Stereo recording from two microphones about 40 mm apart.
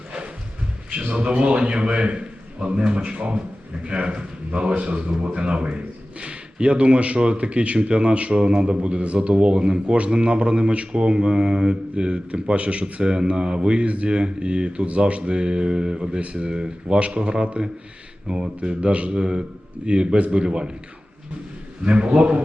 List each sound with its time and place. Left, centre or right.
1.0 s a man's voice: right
21.8 s speech: right